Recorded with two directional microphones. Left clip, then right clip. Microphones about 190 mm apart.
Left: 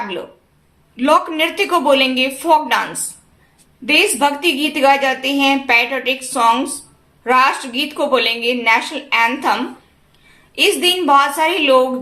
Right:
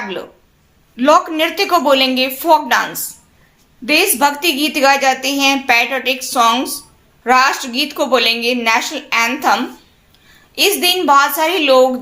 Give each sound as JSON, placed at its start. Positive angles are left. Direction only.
{"t": 0.9, "sound": "a woman's voice", "side_deg": -25}
{"t": 3.8, "sound": "a woman's voice", "side_deg": -25}